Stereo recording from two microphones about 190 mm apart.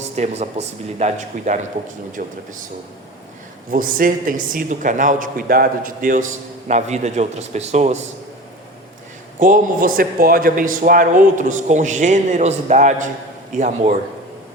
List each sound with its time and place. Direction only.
0.2 s speech: 35° right (ahead or behind)
3.7 s speech: 45° right (ahead or behind)
9.4 s speech: 45° right (ahead or behind)